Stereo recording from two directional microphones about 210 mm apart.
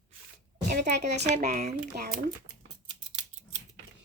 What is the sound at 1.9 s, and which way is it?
Speech, 45° right (ahead or behind).